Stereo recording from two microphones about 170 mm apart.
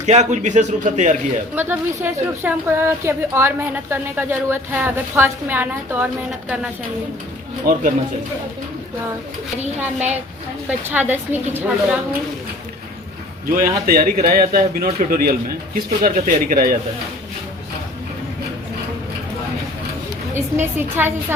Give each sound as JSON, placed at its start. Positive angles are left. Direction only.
{"t": 0.0, "sound": "a man's voice", "side_deg": -45}
{"t": 1.5, "sound": "a woman's voice", "side_deg": -10}
{"t": 7.6, "sound": "a man's voice", "side_deg": -50}
{"t": 10.7, "sound": "a woman's voice", "side_deg": -10}
{"t": 13.5, "sound": "speech", "side_deg": -60}
{"t": 20.3, "sound": "a woman's voice", "side_deg": -15}